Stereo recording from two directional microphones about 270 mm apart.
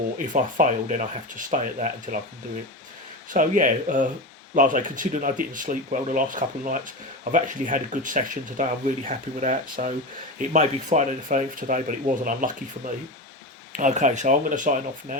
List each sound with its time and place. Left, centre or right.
0.3 s speech: right
3.2 s speech: right
13.7 s speech: right